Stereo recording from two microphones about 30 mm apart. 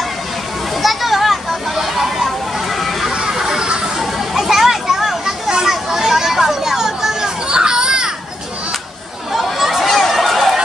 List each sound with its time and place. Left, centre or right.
0.8 s children playing: centre
3.4 s a sound: right
4.0 s children playing: centre
7.4 s children playing: right
9.3 s chatter: centre
9.8 s chatter: centre
10.1 s a sound: centre